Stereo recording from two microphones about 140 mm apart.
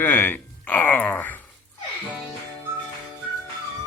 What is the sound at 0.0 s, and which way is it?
Speech, 15° left (ahead or behind).